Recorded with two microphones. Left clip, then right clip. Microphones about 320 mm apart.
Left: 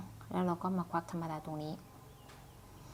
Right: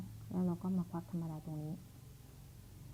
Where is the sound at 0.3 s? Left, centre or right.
Centre.